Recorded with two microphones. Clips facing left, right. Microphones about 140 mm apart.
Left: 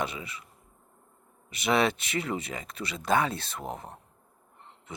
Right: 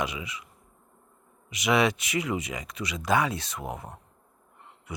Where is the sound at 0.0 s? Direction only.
30° left (ahead or behind).